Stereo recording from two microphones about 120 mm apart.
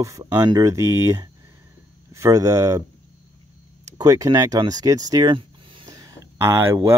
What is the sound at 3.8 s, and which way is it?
Speech, 30° right (ahead or behind).